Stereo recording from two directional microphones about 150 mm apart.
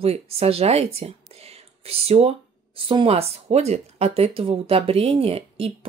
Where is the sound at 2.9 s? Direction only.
40° right (ahead or behind).